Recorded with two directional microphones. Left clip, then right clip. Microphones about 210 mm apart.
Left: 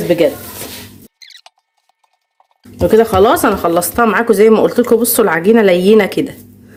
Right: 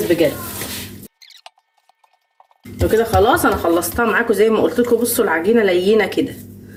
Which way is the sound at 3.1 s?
55° left (ahead or behind).